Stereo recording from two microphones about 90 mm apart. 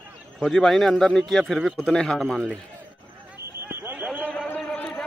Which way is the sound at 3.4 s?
30° right (ahead or behind).